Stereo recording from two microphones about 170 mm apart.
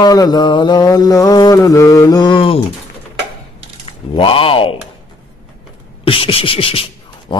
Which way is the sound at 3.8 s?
30° left (ahead or behind).